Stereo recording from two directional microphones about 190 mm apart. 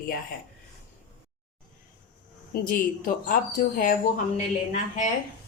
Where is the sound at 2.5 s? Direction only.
50° left (ahead or behind).